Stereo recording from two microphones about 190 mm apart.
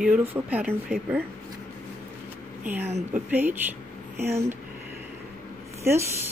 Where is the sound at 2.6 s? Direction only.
10° right (ahead or behind).